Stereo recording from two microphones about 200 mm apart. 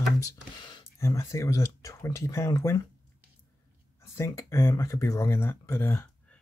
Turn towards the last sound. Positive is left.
turn(degrees=10)  # may be behind; listen again after turning